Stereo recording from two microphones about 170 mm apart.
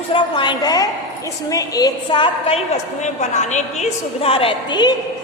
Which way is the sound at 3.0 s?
45° left (ahead or behind).